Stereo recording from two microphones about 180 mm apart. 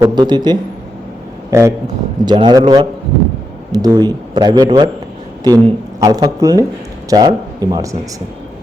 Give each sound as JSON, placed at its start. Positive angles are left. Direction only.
{"t": 0.0, "sound": "speech", "side_deg": -25}